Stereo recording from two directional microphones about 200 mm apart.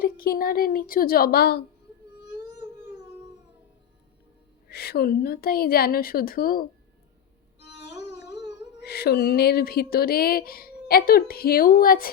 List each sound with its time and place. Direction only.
0.0 s speech: 45° left (ahead or behind)
4.7 s speech: 50° left (ahead or behind)
7.6 s music: 55° left (ahead or behind)
8.3 s music: 20° right (ahead or behind)
8.8 s speech: 55° left (ahead or behind)